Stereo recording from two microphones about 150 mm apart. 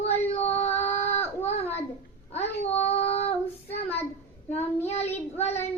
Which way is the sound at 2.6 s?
45° left (ahead or behind).